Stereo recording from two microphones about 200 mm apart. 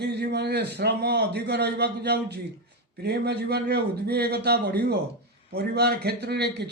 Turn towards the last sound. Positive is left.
turn(degrees=-55)  # may be behind; listen again after turning